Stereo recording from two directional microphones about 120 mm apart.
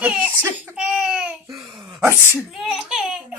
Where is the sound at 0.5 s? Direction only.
10° right (ahead or behind).